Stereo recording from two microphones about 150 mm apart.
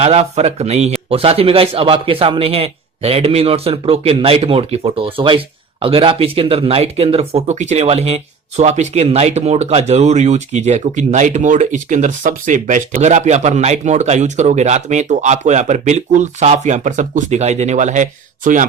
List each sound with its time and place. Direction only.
0.0 s a man's voice: 45° right (ahead or behind)